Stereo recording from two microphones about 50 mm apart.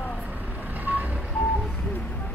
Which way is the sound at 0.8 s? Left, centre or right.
Right.